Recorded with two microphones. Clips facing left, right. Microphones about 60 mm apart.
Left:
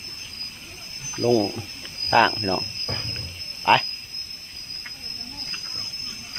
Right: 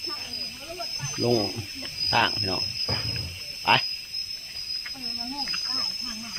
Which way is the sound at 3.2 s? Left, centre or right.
Centre.